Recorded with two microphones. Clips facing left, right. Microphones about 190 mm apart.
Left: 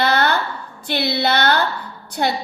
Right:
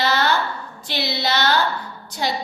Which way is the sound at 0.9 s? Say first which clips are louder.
Left 4 dB; 55° left (ahead or behind).